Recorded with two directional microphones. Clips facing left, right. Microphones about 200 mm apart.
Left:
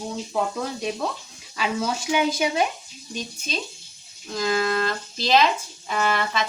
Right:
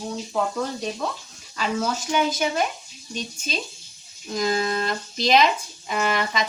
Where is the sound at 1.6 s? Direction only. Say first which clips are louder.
Even; 10° left (ahead or behind).